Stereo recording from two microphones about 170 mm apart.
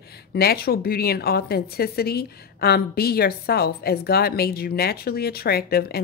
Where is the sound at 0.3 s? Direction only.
65° left (ahead or behind).